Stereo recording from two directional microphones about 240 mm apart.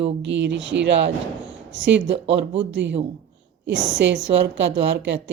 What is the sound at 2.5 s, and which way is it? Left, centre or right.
Speech, right.